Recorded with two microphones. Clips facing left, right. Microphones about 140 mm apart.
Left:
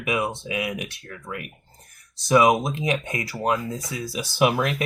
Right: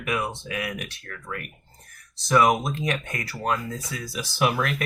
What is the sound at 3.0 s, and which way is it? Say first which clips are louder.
Speech: left 3 dB; 25° left (ahead or behind).